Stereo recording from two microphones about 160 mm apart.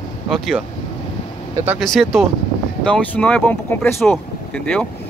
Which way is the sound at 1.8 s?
Centre (ahead or behind).